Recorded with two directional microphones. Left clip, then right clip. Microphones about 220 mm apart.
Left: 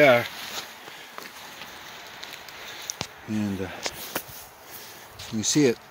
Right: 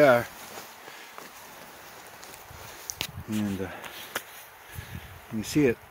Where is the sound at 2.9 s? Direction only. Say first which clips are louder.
Even; 50° right (ahead or behind).